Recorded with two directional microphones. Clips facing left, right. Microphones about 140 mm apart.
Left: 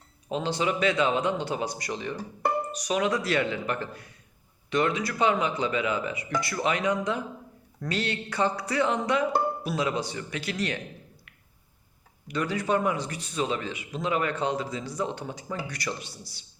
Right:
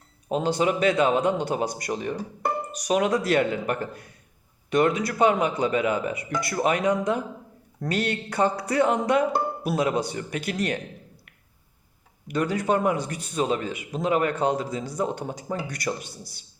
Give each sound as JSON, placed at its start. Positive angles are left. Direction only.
{"t": 0.3, "sound": "a man's voice", "side_deg": -45}
{"t": 12.3, "sound": "a man's voice", "side_deg": -50}